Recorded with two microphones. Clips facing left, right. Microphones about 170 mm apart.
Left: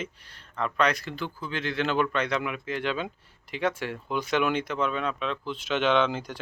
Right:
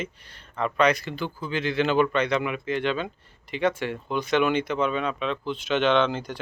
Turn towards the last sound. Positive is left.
turn(degrees=5)  # may be behind; listen again after turning